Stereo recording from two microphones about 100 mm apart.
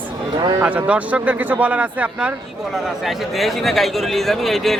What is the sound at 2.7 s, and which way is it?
Speech, centre (ahead or behind).